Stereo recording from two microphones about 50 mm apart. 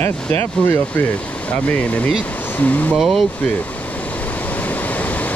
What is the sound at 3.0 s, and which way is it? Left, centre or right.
Speech, centre.